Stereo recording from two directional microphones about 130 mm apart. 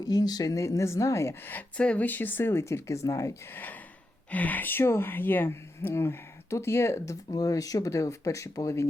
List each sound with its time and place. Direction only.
0.0 s speech: 30° left (ahead or behind)